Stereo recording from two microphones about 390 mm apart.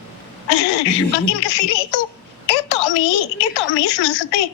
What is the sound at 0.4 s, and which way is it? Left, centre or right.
A woman's voice, left.